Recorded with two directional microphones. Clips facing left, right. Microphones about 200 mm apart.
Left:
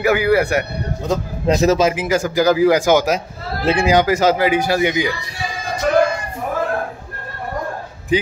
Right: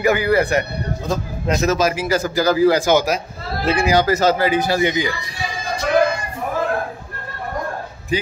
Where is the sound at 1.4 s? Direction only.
30° left (ahead or behind).